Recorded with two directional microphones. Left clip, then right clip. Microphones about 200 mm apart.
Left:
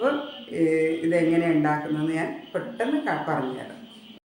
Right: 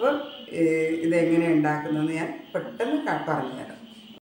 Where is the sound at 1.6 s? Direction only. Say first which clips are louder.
Left 1 dB; 10° left (ahead or behind).